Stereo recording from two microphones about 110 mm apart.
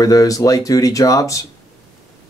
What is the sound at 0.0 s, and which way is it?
Speech, 35° left (ahead or behind).